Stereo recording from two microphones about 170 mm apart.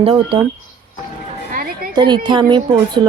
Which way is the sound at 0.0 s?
35° right (ahead or behind).